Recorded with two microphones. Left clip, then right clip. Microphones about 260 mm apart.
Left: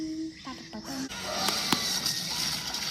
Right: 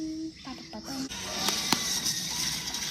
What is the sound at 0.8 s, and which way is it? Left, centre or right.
Printer, left.